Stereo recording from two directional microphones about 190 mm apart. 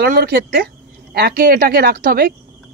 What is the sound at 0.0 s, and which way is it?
A man's voice, 55° right (ahead or behind).